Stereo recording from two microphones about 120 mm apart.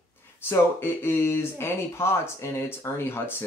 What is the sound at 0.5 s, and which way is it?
Speech, 20° left (ahead or behind).